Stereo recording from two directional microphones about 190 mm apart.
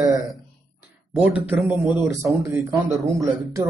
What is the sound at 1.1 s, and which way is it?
Speech, 5° right (ahead or behind).